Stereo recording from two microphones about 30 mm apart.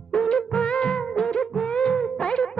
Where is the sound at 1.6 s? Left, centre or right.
Left.